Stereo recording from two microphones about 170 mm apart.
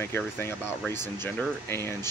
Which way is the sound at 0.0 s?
15° left (ahead or behind).